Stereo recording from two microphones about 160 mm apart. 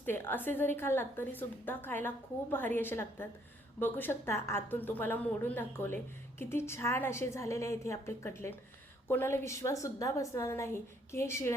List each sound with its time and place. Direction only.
0.0 s a woman's voice: 10° left (ahead or behind)